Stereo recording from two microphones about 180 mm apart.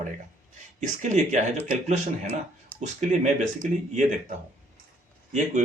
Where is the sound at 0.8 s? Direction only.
40° right (ahead or behind).